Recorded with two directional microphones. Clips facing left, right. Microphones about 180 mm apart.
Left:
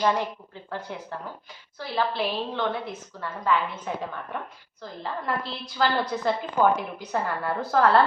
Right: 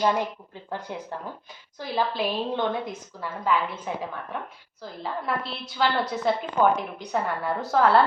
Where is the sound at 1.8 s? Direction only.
15° right (ahead or behind).